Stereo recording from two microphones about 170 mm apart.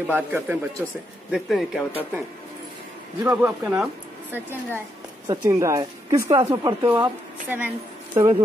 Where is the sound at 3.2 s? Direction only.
10° right (ahead or behind).